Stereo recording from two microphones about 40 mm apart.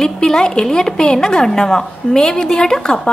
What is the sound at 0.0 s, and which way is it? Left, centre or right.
A woman's voice, centre.